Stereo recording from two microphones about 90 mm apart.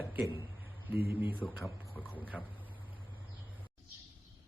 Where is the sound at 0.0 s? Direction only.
20° right (ahead or behind).